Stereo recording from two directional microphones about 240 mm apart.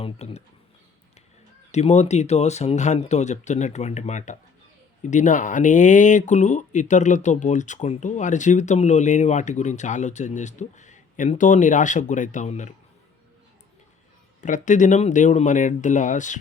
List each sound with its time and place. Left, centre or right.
0.0 s speech: left
1.7 s speech: left
14.4 s speech: left